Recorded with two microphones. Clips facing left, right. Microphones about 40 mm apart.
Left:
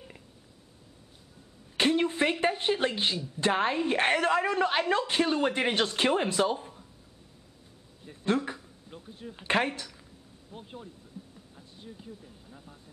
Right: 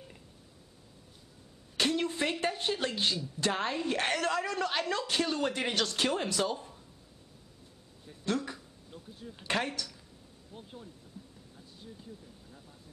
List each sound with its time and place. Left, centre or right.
1.8 s speech: left
8.1 s a sound: left
9.3 s speech: left